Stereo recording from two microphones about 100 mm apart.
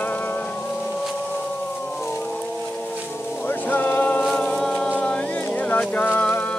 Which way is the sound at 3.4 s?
15° left (ahead or behind).